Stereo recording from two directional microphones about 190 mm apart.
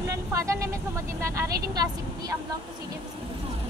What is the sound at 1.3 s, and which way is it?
Speech, 15° right (ahead or behind).